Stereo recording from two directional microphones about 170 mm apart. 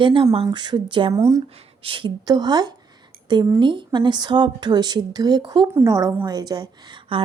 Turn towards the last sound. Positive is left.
turn(degrees=-25)  # may be behind; listen again after turning